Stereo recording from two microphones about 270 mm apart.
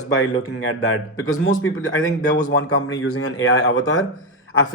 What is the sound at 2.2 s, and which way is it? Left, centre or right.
Speech, left.